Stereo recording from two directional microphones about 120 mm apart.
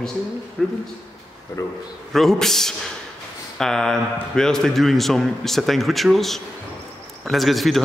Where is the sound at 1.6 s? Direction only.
30° left (ahead or behind).